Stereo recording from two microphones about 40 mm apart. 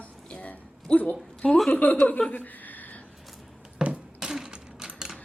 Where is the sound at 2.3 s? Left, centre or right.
Left.